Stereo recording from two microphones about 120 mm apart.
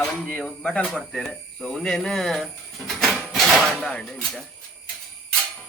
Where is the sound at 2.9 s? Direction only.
Centre (ahead or behind).